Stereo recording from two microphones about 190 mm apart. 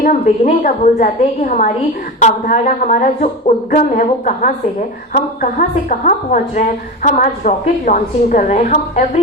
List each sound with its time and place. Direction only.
0.1 s a woman's voice: 40° left (ahead or behind)